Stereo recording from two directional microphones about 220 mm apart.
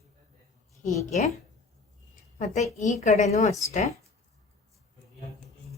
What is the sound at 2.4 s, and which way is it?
A woman's voice, 30° left (ahead or behind).